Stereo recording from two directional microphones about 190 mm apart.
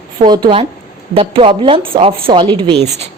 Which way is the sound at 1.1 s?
30° right (ahead or behind).